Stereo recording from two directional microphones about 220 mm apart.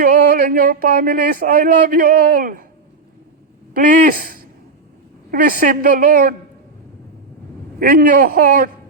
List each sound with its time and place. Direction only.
0.0 s speech: 40° right (ahead or behind)
3.8 s speech: 40° right (ahead or behind)
7.8 s speech: 40° right (ahead or behind)